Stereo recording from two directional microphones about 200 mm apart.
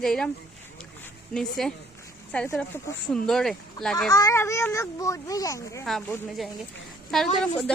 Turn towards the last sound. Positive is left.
turn(degrees=5)  # may be behind; listen again after turning